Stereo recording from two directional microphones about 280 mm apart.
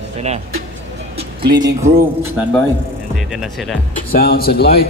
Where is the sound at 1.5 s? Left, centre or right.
Centre.